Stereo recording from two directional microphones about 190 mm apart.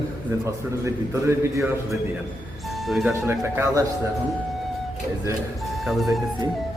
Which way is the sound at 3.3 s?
10° right (ahead or behind).